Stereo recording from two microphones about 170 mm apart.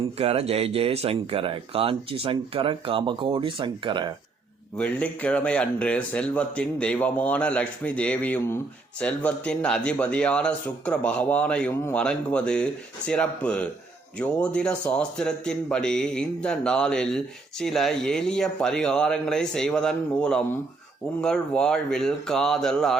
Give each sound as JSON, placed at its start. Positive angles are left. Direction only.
{"t": 0.2, "sound": "speech", "side_deg": -35}
{"t": 4.8, "sound": "a man's voice", "side_deg": 5}